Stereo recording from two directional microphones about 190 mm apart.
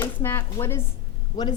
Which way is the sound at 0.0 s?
10° left (ahead or behind).